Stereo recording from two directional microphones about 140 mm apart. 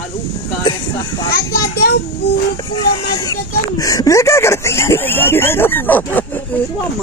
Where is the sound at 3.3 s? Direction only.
25° left (ahead or behind).